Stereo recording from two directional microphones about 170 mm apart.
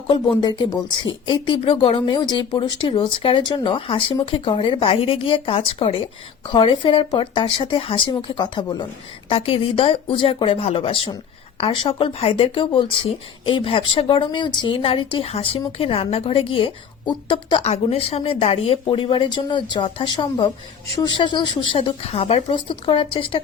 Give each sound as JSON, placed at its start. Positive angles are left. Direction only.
{"t": 1.2, "sound": "a woman's voice", "side_deg": 30}